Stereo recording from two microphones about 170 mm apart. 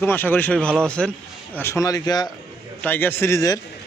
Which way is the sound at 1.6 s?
15° left (ahead or behind).